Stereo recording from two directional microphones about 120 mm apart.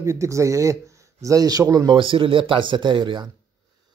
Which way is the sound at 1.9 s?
45° right (ahead or behind).